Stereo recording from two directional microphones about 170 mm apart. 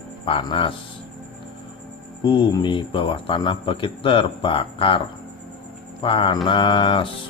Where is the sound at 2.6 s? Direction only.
30° left (ahead or behind).